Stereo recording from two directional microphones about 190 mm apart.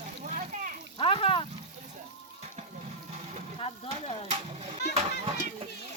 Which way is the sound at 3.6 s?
30° left (ahead or behind).